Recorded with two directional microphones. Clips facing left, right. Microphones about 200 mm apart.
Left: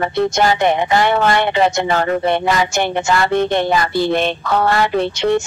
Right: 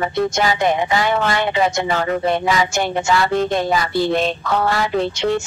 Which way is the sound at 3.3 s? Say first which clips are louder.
Left 2 dB; 65° left (ahead or behind).